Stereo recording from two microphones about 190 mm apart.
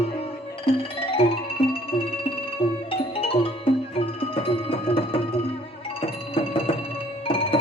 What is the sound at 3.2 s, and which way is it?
Music, 30° left (ahead or behind).